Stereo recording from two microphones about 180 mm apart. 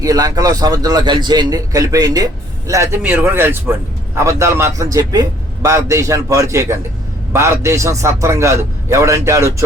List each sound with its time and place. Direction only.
0.0 s a man's voice: 20° right (ahead or behind)